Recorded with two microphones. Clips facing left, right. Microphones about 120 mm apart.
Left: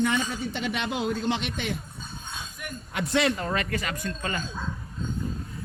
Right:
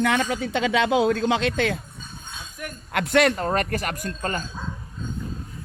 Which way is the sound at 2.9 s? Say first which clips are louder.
Right 6 dB; 80° right.